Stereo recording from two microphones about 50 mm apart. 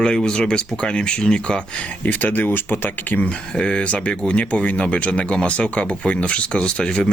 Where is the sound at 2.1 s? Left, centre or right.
Left.